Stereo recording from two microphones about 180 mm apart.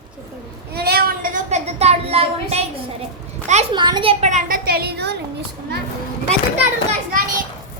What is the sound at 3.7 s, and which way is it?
Speech, 25° right (ahead or behind).